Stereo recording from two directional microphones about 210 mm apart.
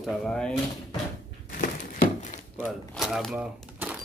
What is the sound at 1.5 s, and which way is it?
Crumpling, 40° left (ahead or behind).